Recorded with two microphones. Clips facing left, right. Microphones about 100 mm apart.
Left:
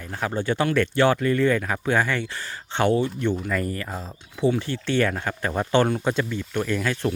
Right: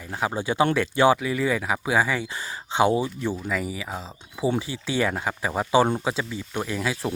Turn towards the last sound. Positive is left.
turn(degrees=-10)  # may be behind; listen again after turning